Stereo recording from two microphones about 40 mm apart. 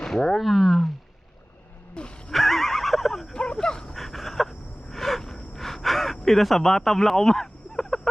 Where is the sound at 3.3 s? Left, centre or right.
Left.